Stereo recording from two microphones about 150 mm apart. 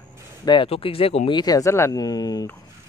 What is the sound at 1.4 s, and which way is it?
Speech, 25° left (ahead or behind).